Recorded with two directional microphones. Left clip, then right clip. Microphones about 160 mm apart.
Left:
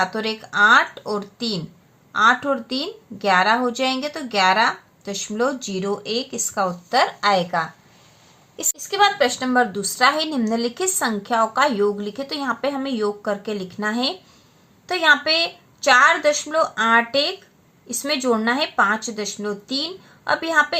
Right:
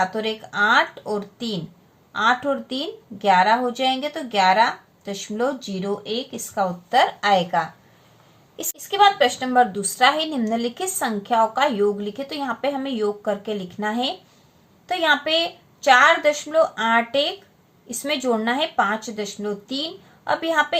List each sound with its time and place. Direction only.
0.0 s a woman's voice: 25° left (ahead or behind)